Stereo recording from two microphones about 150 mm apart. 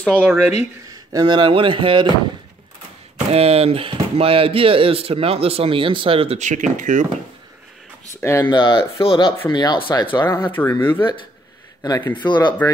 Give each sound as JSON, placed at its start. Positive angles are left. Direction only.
{"t": 0.1, "sound": "speech", "side_deg": -10}
{"t": 1.1, "sound": "speech", "side_deg": -30}
{"t": 3.3, "sound": "speech", "side_deg": -40}
{"t": 8.2, "sound": "speech", "side_deg": 20}
{"t": 8.5, "sound": "speech", "side_deg": 30}
{"t": 10.2, "sound": "speech", "side_deg": 15}
{"t": 11.8, "sound": "speech", "side_deg": 25}